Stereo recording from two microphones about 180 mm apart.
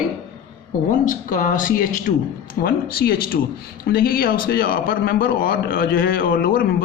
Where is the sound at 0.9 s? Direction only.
50° left (ahead or behind).